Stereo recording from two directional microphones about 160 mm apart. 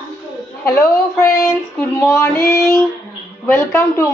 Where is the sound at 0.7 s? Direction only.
15° left (ahead or behind).